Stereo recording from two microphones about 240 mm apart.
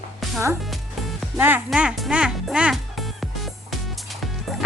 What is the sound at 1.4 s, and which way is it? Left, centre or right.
Speech, centre.